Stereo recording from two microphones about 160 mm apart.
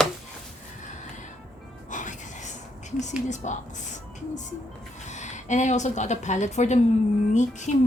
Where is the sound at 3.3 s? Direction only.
50° left (ahead or behind).